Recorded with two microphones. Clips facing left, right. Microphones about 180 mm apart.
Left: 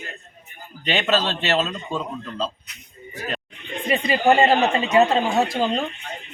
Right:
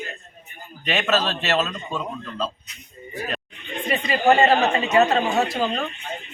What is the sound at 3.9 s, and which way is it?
Speech, 15° left (ahead or behind).